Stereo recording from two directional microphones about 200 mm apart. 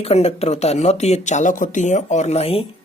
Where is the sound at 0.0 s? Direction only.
30° left (ahead or behind).